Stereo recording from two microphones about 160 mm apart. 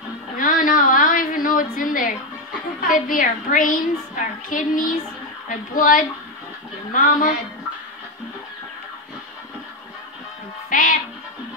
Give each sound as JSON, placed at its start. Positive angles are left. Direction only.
{"t": 0.4, "sound": "a sound", "side_deg": 60}
{"t": 2.9, "sound": "a woman's voice", "side_deg": 55}
{"t": 10.7, "sound": "music", "side_deg": 55}